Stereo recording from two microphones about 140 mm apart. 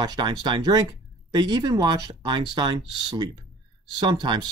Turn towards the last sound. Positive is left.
turn(degrees=-30)  # may be behind; listen again after turning